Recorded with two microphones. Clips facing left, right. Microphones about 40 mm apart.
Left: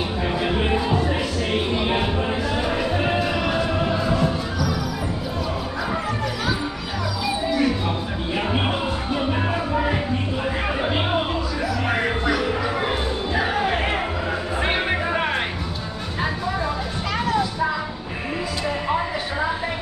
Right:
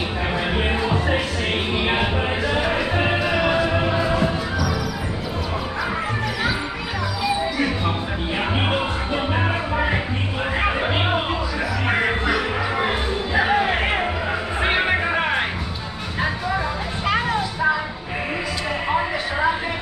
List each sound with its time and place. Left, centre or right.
0.3 s music: centre
0.9 s music: right
1.8 s music: right
8.5 s music: right
15.1 s music: centre